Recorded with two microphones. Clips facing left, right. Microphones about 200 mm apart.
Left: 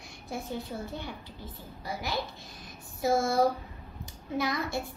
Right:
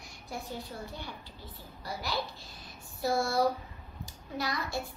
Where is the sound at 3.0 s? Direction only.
20° left (ahead or behind).